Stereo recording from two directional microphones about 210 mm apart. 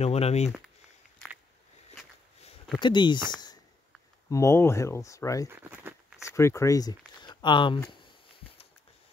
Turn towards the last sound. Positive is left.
turn(degrees=20)  # may be behind; listen again after turning